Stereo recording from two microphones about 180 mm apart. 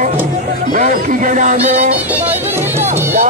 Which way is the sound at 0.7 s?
50° right (ahead or behind).